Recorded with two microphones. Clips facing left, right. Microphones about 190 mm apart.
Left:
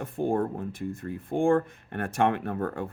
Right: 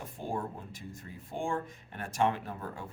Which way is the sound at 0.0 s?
60° left (ahead or behind).